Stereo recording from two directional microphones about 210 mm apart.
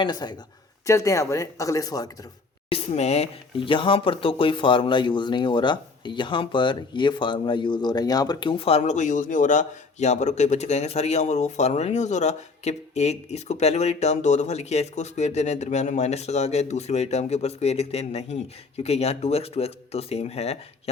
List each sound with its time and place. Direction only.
0.0 s speech: 20° left (ahead or behind)
2.6 s speech: 30° left (ahead or behind)